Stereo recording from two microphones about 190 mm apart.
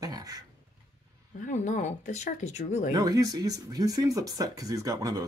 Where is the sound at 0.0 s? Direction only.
20° right (ahead or behind).